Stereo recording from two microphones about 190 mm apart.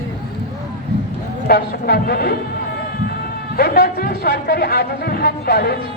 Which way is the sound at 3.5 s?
55° left (ahead or behind).